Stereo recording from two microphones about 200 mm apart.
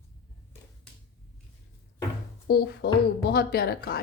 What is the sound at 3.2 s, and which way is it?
Speech, 55° left (ahead or behind).